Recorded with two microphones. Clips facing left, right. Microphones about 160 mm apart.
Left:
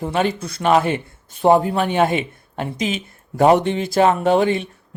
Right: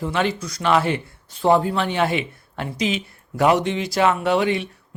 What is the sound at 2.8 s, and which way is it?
Speech, 45° left (ahead or behind).